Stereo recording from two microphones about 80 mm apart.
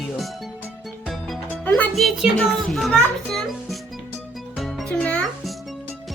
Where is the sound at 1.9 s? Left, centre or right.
Centre.